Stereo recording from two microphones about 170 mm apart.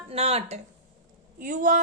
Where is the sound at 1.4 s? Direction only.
50° right (ahead or behind).